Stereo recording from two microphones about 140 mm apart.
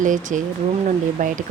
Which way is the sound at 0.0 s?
65° right (ahead or behind).